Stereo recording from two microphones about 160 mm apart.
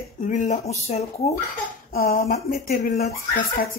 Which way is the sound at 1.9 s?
70° left (ahead or behind).